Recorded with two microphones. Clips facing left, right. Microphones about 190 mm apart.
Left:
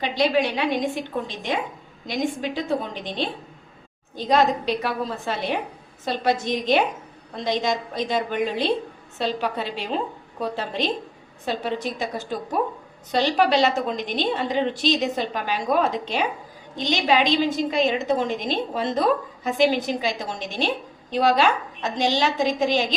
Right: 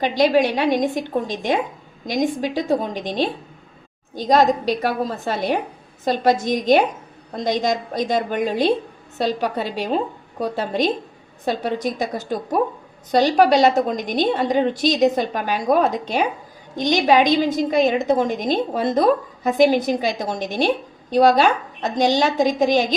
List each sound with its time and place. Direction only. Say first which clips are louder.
0.0 s a woman's voice: right 5 dB; 40° right (ahead or behind)